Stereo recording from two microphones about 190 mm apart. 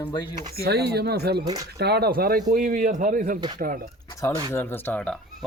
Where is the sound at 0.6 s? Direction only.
60° right (ahead or behind); by 3.3 s 45° right (ahead or behind).